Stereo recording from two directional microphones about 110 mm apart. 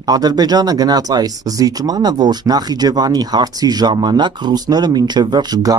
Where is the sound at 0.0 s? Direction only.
35° right (ahead or behind).